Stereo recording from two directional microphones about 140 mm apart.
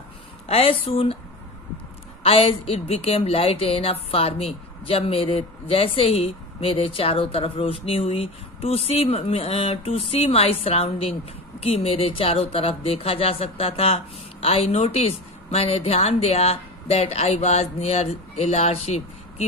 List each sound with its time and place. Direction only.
0.5 s speech: 45° left (ahead or behind)
2.2 s speech: 45° left (ahead or behind)